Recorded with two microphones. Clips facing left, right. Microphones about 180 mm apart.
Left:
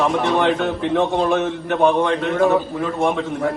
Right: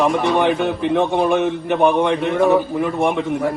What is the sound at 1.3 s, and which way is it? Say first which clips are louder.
Speech: right 2 dB; 15° right (ahead or behind).